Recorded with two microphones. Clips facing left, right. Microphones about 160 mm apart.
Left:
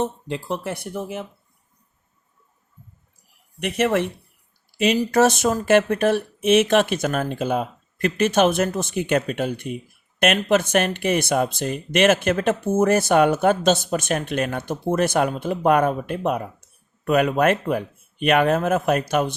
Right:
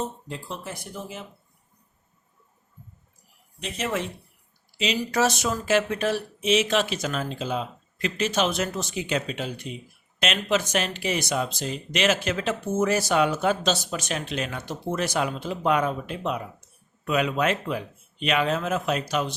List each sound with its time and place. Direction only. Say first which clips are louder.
0.0 s speech: left 7 dB; 70° left (ahead or behind)
3.6 s speech: left 8 dB; 65° left (ahead or behind)